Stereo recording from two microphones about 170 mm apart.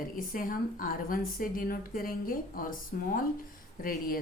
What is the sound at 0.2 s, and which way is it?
A woman's voice, 55° left (ahead or behind).